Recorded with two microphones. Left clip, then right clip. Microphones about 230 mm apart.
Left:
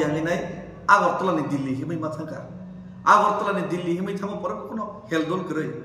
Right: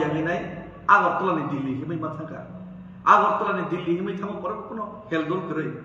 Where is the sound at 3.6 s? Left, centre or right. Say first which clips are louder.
Even; centre.